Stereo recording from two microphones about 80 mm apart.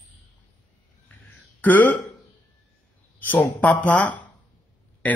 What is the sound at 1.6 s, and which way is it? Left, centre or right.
Speech, left.